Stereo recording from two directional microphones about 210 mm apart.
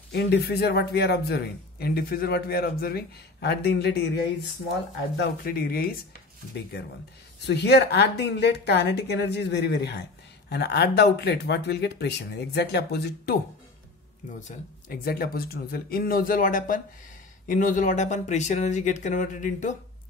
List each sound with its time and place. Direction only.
0.1 s a man's voice: 50° left (ahead or behind)
7.4 s a man's voice: 50° left (ahead or behind)
14.5 s a man's voice: 45° left (ahead or behind)